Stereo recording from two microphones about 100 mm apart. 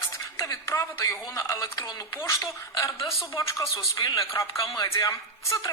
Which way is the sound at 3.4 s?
30° left (ahead or behind).